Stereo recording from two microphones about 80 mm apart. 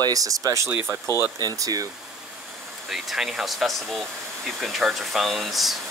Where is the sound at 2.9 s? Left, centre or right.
Centre.